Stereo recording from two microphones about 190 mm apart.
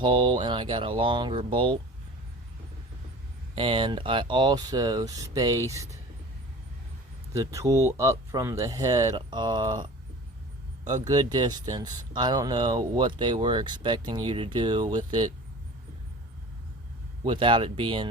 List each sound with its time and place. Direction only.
0.0 s speech: 25° right (ahead or behind)
3.5 s speech: 25° right (ahead or behind)
7.3 s speech: 15° right (ahead or behind)
17.2 s speech: 25° right (ahead or behind)